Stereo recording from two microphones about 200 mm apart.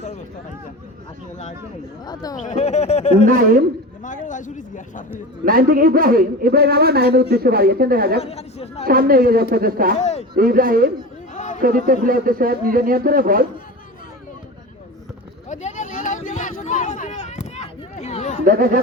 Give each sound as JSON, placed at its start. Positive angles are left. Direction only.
{"t": 2.3, "sound": "a man's voice", "side_deg": 40}
{"t": 3.2, "sound": "a man's voice", "side_deg": -45}
{"t": 4.0, "sound": "a man's voice", "side_deg": 40}
{"t": 5.5, "sound": "a man's voice", "side_deg": -45}
{"t": 8.2, "sound": "a man's voice", "side_deg": 30}
{"t": 8.8, "sound": "a man's voice", "side_deg": -45}
{"t": 10.0, "sound": "speech", "side_deg": 35}
{"t": 10.3, "sound": "a man's voice", "side_deg": -45}
{"t": 11.3, "sound": "chatter", "side_deg": 35}
{"t": 11.6, "sound": "a man's voice", "side_deg": -45}
{"t": 15.4, "sound": "a sound", "side_deg": 40}
{"t": 18.4, "sound": "a man's voice", "side_deg": -45}